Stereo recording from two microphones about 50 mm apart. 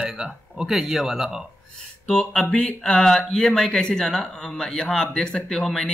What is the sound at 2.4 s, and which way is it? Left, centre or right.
Speech, left.